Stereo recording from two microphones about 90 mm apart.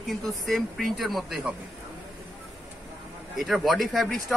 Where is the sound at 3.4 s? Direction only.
Centre (ahead or behind).